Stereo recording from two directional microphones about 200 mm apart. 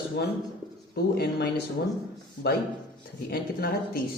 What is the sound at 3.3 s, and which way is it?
Speech, 50° left (ahead or behind).